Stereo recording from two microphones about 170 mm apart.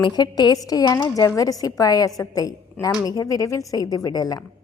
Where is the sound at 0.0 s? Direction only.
25° left (ahead or behind).